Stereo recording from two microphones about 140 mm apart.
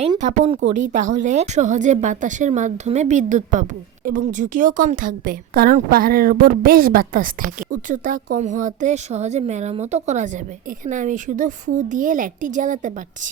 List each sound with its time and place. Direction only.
0.2 s a woman's voice: 60° right (ahead or behind)